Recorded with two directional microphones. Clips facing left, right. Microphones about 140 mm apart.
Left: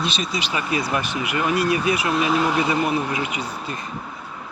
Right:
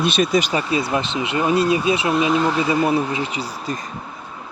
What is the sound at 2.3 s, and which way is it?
Speech, 10° left (ahead or behind).